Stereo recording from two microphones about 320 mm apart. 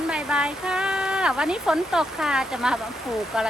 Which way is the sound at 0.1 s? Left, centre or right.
Centre.